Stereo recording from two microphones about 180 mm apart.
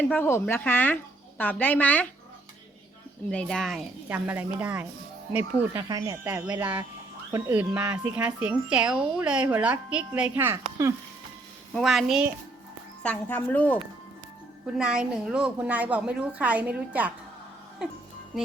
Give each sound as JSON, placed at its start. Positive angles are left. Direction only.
{"t": 0.1, "sound": "a woman's voice", "side_deg": 10}
{"t": 3.2, "sound": "a woman's voice", "side_deg": 0}
{"t": 5.7, "sound": "speech", "side_deg": -20}
{"t": 11.7, "sound": "a woman's voice", "side_deg": 0}
{"t": 13.0, "sound": "a woman's voice", "side_deg": 10}
{"t": 14.8, "sound": "speech", "side_deg": -5}